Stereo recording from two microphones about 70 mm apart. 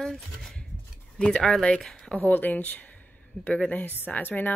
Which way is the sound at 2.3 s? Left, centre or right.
Left.